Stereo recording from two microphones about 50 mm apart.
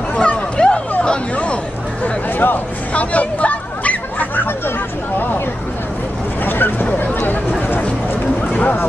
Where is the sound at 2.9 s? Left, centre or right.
Left.